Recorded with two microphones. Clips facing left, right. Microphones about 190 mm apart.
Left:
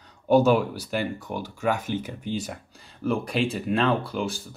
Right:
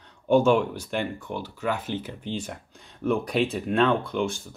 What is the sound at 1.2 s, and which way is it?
Speech, 45° left (ahead or behind).